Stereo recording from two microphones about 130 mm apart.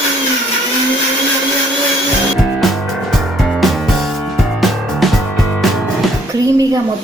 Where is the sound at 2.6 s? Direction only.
Centre (ahead or behind).